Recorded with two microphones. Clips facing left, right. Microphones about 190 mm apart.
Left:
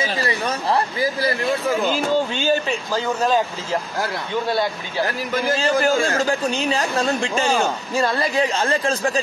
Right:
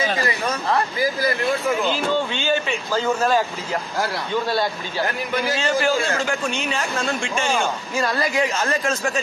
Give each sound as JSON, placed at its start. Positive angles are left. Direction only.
{"t": 0.3, "sound": "speech", "side_deg": 30}
{"t": 2.9, "sound": "speech", "side_deg": 15}
{"t": 5.3, "sound": "speech", "side_deg": 35}